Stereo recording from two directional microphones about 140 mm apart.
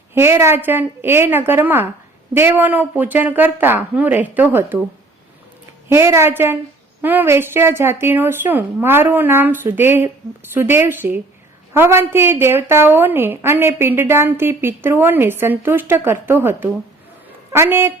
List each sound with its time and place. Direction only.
0.1 s a woman's voice: 15° right (ahead or behind)
5.9 s a woman's voice: 20° right (ahead or behind)